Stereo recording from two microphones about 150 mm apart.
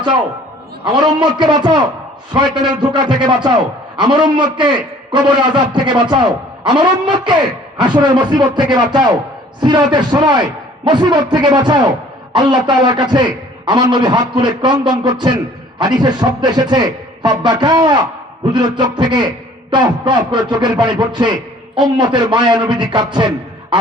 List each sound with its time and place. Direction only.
0.9 s a man's voice: 30° right (ahead or behind)